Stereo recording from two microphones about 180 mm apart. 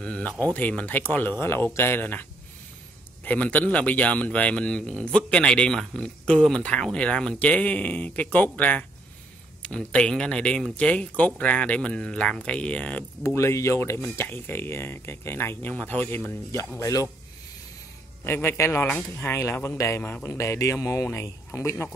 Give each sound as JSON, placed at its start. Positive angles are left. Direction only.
{"t": 0.0, "sound": "speech", "side_deg": 5}
{"t": 3.3, "sound": "speech", "side_deg": 10}
{"t": 18.2, "sound": "speech", "side_deg": 15}